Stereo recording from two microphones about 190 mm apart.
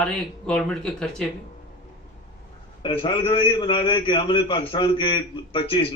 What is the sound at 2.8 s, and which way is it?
A man's voice, 25° left (ahead or behind).